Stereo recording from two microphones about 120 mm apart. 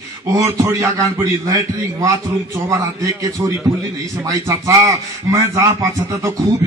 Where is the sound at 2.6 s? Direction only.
25° right (ahead or behind).